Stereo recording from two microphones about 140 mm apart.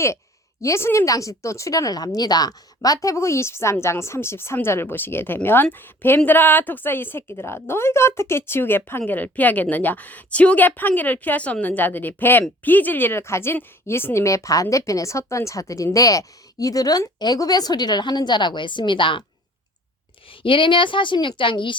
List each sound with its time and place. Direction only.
0.6 s speech: 20° left (ahead or behind); by 19.2 s 35° left (ahead or behind)
20.4 s a woman's voice: 35° left (ahead or behind)